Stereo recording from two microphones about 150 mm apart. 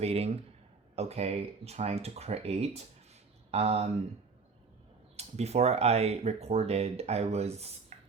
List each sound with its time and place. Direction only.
0.0 s speech: 45° right (ahead or behind)
5.1 s speech: 45° right (ahead or behind)